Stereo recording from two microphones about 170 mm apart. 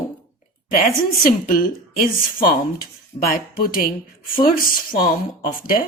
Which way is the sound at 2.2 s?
55° left (ahead or behind).